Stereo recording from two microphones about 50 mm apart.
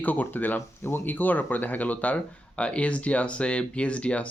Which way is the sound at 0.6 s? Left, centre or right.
Left.